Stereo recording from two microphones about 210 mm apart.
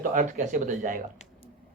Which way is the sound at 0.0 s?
40° right (ahead or behind).